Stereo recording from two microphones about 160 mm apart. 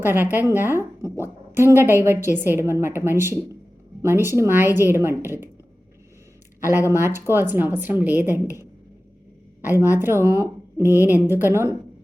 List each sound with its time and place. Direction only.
0.0 s a woman's voice: 15° right (ahead or behind)
6.7 s a woman's voice: 15° right (ahead or behind)